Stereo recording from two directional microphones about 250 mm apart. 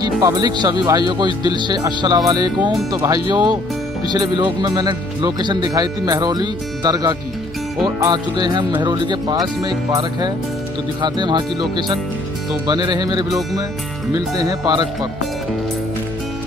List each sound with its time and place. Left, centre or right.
0.0 s speech: centre